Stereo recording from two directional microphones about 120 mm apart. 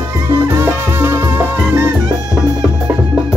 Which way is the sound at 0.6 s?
20° right (ahead or behind).